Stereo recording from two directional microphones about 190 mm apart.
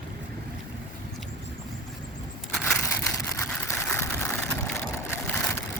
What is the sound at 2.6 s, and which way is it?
Vehicle, 10° left (ahead or behind).